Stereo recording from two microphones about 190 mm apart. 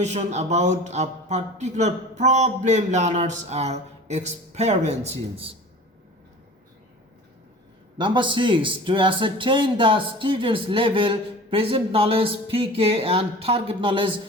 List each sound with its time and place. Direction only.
0.0 s speech: 35° right (ahead or behind)
7.9 s speech: 25° right (ahead or behind)